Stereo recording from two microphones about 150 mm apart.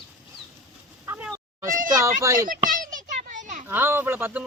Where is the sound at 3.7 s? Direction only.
15° right (ahead or behind).